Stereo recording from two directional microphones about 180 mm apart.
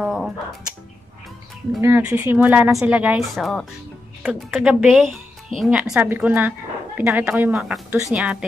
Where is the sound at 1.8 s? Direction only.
10° right (ahead or behind).